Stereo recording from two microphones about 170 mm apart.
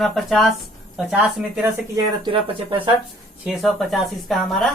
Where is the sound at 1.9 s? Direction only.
30° right (ahead or behind).